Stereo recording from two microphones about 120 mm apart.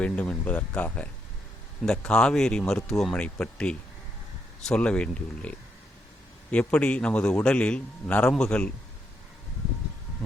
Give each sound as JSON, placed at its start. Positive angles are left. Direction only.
{"t": 0.0, "sound": "a man's voice", "side_deg": 10}